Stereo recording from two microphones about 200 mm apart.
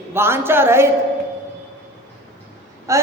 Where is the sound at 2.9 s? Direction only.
15° right (ahead or behind).